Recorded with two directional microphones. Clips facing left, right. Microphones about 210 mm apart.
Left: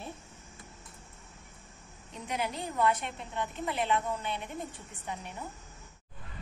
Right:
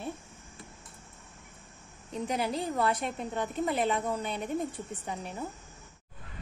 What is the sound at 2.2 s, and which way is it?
A woman's voice, 35° right (ahead or behind).